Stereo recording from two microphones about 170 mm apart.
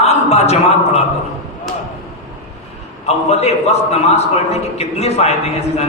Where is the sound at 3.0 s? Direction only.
40° left (ahead or behind).